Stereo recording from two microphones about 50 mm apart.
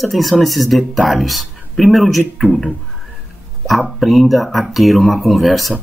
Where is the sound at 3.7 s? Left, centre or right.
Centre.